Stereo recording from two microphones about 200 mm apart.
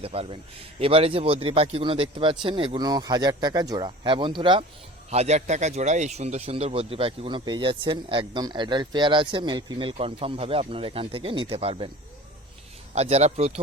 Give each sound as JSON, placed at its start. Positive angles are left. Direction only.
{"t": 0.0, "sound": "speech", "side_deg": -30}
{"t": 5.1, "sound": "speech", "side_deg": -35}
{"t": 12.9, "sound": "speech", "side_deg": -35}